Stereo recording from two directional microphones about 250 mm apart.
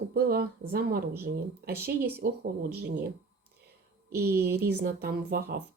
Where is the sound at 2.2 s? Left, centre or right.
Right.